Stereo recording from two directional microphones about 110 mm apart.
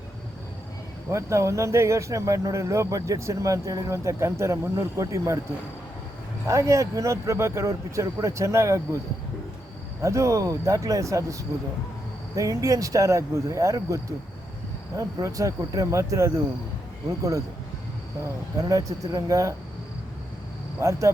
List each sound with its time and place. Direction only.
1.1 s speech: 25° right (ahead or behind)
6.5 s speech: 30° right (ahead or behind)
10.0 s speech: 25° right (ahead or behind)
12.4 s speech: 30° right (ahead or behind)
18.5 s speech: 30° right (ahead or behind)
20.7 s speech: 30° right (ahead or behind)